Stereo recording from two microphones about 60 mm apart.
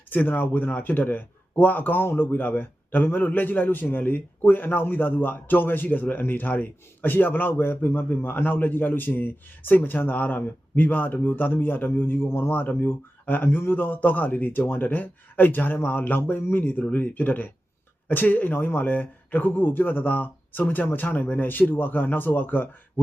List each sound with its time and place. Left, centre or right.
0.1 s speech: left